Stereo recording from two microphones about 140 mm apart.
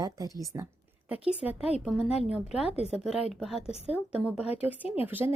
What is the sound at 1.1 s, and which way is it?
A woman's voice, 10° right (ahead or behind).